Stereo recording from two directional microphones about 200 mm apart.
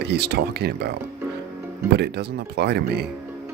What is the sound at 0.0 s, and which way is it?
Speech, 55° right (ahead or behind).